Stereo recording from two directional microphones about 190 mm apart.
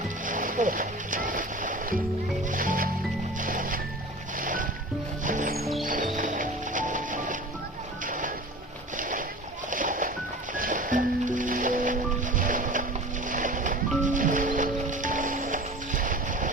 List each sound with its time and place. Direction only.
0.3 s music: 45° right (ahead or behind)
9.0 s boat: 45° right (ahead or behind)
10.5 s music: 45° right (ahead or behind)
12.4 s boat: 45° right (ahead or behind)
13.2 s music: 45° right (ahead or behind)